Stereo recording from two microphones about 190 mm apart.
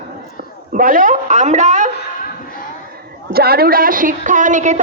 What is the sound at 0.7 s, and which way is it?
A woman's voice, 45° right (ahead or behind).